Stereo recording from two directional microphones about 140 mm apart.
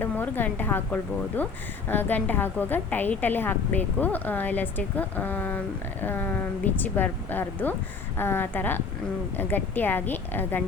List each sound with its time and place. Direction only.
0.0 s a woman's voice: 15° left (ahead or behind)